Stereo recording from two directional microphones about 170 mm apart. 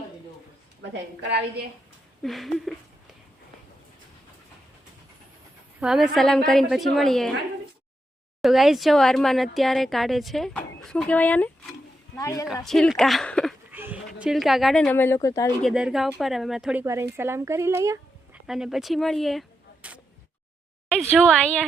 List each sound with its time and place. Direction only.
0.9 s a woman's voice: 90° right
2.2 s speech: centre (ahead or behind)
5.8 s speech: centre (ahead or behind)
8.4 s a woman's voice: centre (ahead or behind); by 12.5 s 20° left (ahead or behind)
12.6 s speech: centre (ahead or behind)
13.7 s a sound: 10° right (ahead or behind)
14.2 s speech: centre (ahead or behind); by 15.5 s 20° left (ahead or behind)
15.6 s speech: 5° right (ahead or behind)
16.8 s speech: 15° right (ahead or behind)
18.4 s a woman's voice: centre (ahead or behind)